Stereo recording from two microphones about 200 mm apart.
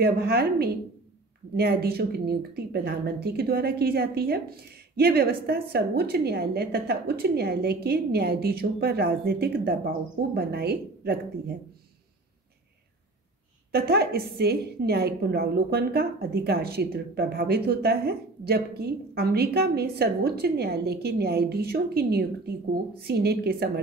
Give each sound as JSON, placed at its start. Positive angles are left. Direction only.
{"t": 0.0, "sound": "speech", "side_deg": -50}
{"t": 13.7, "sound": "speech", "side_deg": -50}